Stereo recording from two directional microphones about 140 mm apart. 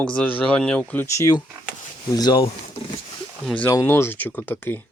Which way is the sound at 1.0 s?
20° left (ahead or behind).